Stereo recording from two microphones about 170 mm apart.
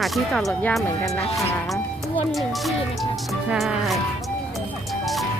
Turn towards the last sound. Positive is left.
turn(degrees=0)  # may be behind; listen again after turning